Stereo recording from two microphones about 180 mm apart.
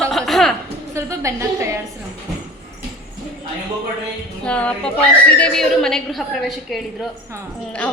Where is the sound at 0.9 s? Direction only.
15° right (ahead or behind).